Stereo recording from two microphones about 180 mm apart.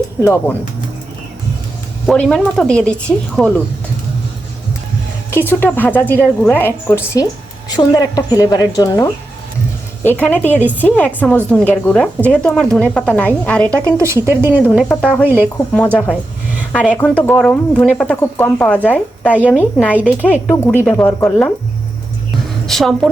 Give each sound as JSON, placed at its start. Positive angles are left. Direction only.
{"t": 0.2, "sound": "speech", "side_deg": 10}
{"t": 2.0, "sound": "speech", "side_deg": 5}
{"t": 5.3, "sound": "speech", "side_deg": 10}
{"t": 10.6, "sound": "speech", "side_deg": -10}
{"t": 10.8, "sound": "speech", "side_deg": 10}
{"t": 13.9, "sound": "speech", "side_deg": -15}
{"t": 14.8, "sound": "speech", "side_deg": 5}
{"t": 22.6, "sound": "a woman's voice", "side_deg": 0}